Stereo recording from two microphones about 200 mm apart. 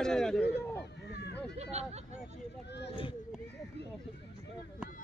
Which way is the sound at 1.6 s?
35° right (ahead or behind).